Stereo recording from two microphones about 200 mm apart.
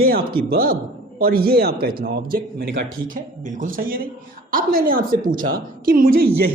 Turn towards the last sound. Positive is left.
turn(degrees=-45)  # may be behind; listen again after turning